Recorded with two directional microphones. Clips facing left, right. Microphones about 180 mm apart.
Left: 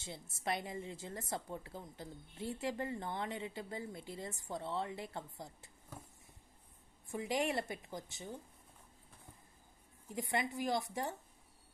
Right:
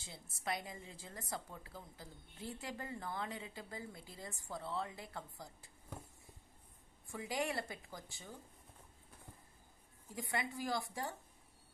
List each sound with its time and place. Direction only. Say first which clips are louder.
0.0 s a woman's voice: left 3 dB; 25° left (ahead or behind)
7.1 s a woman's voice: left 4 dB; 25° left (ahead or behind)
10.1 s a woman's voice: left 4 dB; 20° left (ahead or behind)